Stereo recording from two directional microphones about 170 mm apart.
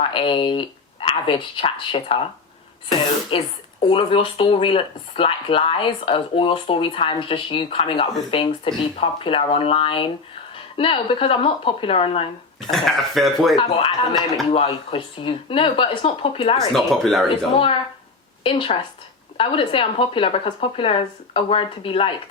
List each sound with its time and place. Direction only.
0.0 s speech: 30° left (ahead or behind)
3.3 s speech: 30° left (ahead or behind)
12.7 s speech: centre (ahead or behind)
13.6 s speech: 30° left (ahead or behind)
16.6 s speech: centre (ahead or behind)
18.4 s speech: 30° left (ahead or behind)